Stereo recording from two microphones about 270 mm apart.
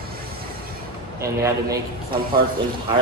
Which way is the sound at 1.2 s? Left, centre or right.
Centre.